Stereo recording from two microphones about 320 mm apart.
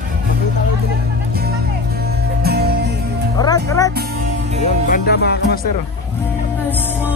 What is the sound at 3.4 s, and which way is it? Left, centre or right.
Music, centre.